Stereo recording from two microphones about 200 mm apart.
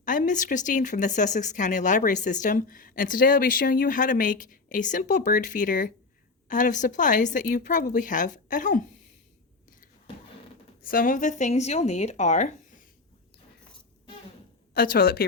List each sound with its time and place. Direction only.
0.0 s speech: 40° left (ahead or behind)
10.8 s speech: 45° left (ahead or behind)
14.7 s speech: 45° left (ahead or behind)